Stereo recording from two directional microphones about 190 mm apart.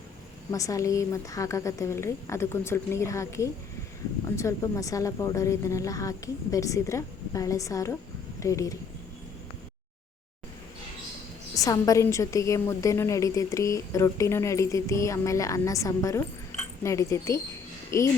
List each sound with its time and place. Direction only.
0.5 s a woman's voice: 15° left (ahead or behind)
11.5 s a woman's voice: 15° left (ahead or behind)